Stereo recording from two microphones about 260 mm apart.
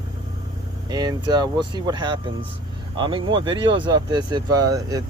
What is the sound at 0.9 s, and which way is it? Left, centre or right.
Speech, centre.